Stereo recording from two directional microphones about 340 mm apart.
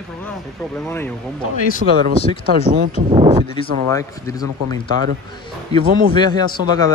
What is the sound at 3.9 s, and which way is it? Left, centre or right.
Speech, centre.